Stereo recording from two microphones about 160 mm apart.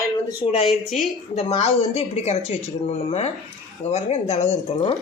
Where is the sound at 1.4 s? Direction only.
40° left (ahead or behind).